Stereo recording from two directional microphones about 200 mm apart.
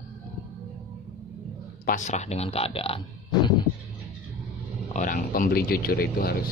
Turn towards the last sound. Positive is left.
turn(degrees=50)  # may be behind; listen again after turning